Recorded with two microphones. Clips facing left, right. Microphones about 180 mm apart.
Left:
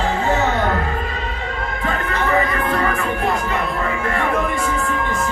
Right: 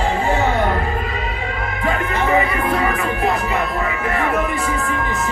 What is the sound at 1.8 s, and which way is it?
Music, 15° right (ahead or behind).